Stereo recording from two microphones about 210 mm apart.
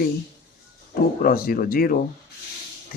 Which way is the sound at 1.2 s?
45° left (ahead or behind).